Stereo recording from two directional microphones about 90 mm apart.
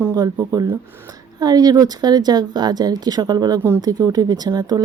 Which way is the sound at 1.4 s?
45° right (ahead or behind).